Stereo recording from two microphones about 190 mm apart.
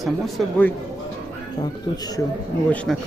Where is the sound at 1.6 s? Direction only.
20° left (ahead or behind).